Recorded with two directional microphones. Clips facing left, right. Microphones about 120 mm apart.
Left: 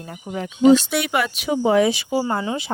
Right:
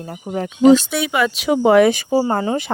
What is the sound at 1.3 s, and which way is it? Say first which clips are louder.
Speech: right 6 dB; 85° right.